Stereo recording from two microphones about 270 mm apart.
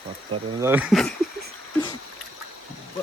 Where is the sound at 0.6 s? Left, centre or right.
Centre.